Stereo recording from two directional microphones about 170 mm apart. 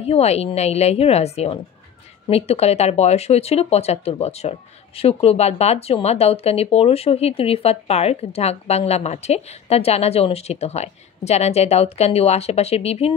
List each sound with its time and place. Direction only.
0.0 s speech: 40° left (ahead or behind)